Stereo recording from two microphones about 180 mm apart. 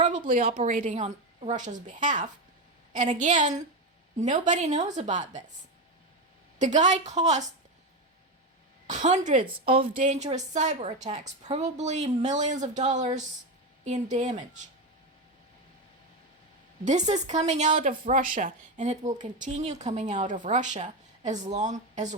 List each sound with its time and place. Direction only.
0.3 s a woman's voice: 50° right (ahead or behind)
6.6 s speech: 40° right (ahead or behind)
8.9 s a woman's voice: 40° right (ahead or behind)
16.8 s speech: 40° right (ahead or behind)